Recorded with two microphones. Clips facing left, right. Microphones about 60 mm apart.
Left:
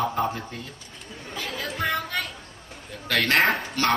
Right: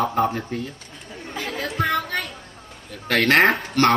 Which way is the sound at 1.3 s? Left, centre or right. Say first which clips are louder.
Right 3 dB; right.